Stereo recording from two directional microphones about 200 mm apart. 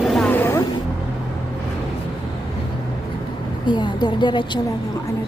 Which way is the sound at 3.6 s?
20° left (ahead or behind).